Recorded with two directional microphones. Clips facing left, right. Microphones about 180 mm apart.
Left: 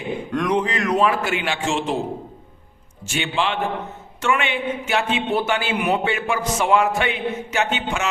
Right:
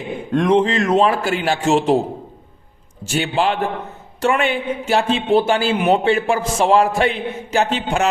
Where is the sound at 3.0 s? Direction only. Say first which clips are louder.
Right 5 dB; 35° right (ahead or behind).